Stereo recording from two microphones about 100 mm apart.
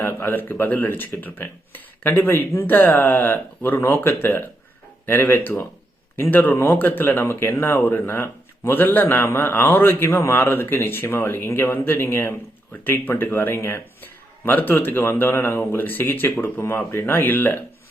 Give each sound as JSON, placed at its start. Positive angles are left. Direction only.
{"t": 0.0, "sound": "speech", "side_deg": 20}